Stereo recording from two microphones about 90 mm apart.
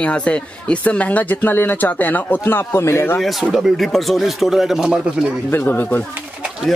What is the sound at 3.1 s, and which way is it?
Speech, centre (ahead or behind).